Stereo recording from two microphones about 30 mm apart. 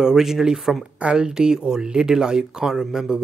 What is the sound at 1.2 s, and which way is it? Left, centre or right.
Speech, right.